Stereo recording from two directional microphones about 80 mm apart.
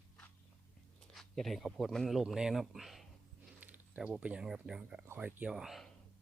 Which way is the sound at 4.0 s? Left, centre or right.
Centre.